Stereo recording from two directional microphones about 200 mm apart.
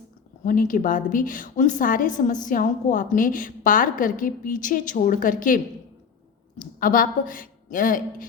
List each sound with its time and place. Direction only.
0.4 s a woman's voice: 40° left (ahead or behind)
6.6 s a woman's voice: 45° left (ahead or behind)